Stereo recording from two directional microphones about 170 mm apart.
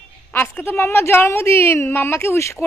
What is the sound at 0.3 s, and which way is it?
A woman's voice, 10° left (ahead or behind).